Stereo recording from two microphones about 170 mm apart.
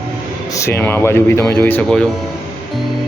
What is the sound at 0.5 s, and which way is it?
Speech, 15° left (ahead or behind).